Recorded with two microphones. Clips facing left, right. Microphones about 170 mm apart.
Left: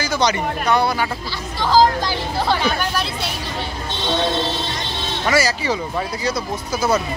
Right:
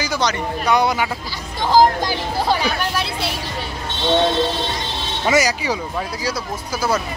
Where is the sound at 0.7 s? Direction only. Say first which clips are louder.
Right 1 dB; 15° right (ahead or behind).